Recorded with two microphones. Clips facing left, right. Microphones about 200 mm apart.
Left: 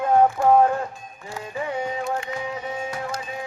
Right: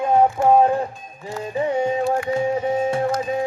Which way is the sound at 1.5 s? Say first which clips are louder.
Right 7 dB; 20° right (ahead or behind).